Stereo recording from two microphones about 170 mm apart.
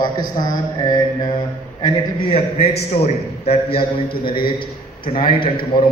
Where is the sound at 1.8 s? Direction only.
35° left (ahead or behind).